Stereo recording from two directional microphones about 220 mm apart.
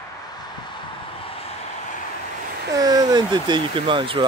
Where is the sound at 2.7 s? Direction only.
15° right (ahead or behind).